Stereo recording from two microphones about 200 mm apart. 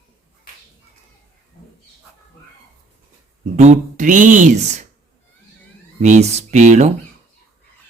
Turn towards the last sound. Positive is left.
turn(degrees=-35)  # may be behind; listen again after turning